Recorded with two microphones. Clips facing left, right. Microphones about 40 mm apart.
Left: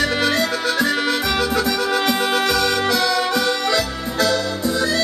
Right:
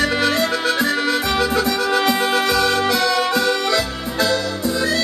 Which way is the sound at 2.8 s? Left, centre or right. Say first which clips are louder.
Right 1 dB; centre.